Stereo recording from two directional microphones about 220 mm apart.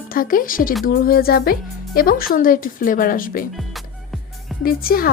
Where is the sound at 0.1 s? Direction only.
40° left (ahead or behind).